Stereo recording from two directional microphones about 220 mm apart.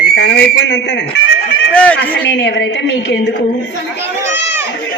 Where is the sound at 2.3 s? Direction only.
50° left (ahead or behind).